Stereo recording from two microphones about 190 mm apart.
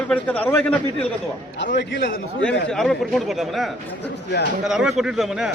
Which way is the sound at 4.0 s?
65° left (ahead or behind).